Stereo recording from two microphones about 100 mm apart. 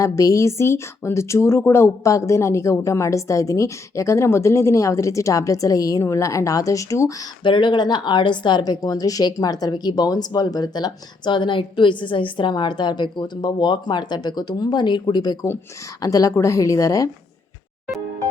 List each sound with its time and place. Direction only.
0.0 s speech: 35° left (ahead or behind)
7.4 s a woman's voice: 55° left (ahead or behind); by 17.1 s 35° left (ahead or behind)